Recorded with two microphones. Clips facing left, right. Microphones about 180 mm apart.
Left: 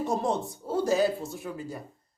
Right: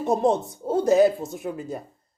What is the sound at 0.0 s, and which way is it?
Speech, 20° right (ahead or behind).